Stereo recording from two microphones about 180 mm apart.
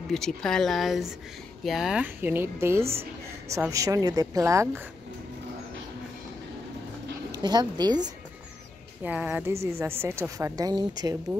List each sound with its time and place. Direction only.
0.1 s a woman's voice: 5° left (ahead or behind); by 4.8 s 15° right (ahead or behind)
7.3 s speech: 25° right (ahead or behind)
9.0 s a woman's voice: 10° right (ahead or behind)